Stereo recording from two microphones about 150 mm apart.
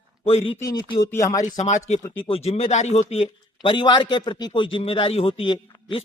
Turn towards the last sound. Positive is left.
turn(degrees=35)  # may be behind; listen again after turning